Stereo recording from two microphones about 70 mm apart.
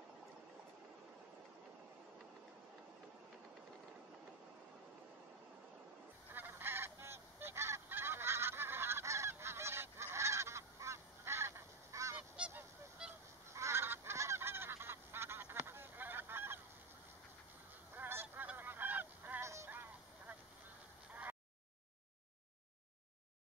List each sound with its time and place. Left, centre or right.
6.3 s goose: right
12.4 s goose: centre
13.5 s goose: right
15.6 s honk: right
17.9 s goose: right
19.4 s a sound: right
19.7 s a sound: right